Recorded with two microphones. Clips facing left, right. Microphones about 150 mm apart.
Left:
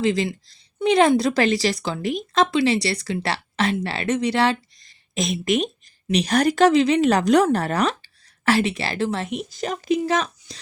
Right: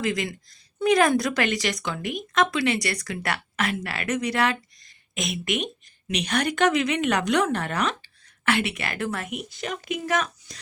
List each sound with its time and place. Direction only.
0.0 s speech: 30° left (ahead or behind)